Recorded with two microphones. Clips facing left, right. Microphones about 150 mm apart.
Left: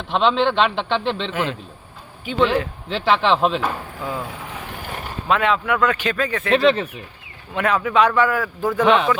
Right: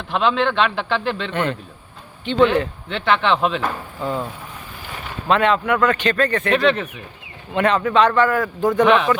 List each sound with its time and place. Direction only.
0.3 s a man's voice: centre (ahead or behind)
5.3 s a man's voice: centre (ahead or behind)
6.7 s speech: 30° left (ahead or behind)
7.5 s a man's voice: 5° left (ahead or behind)